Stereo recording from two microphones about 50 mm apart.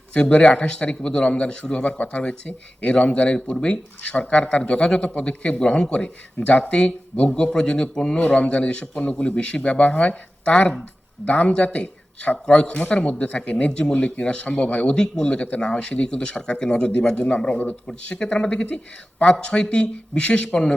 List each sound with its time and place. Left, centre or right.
0.1 s a man's voice: left
14.9 s a man's voice: centre